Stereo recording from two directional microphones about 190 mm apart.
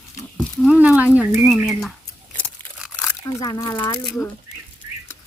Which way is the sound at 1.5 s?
Centre (ahead or behind).